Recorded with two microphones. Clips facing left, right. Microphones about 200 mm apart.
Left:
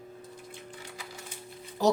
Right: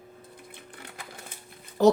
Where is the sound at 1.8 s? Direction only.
60° right (ahead or behind).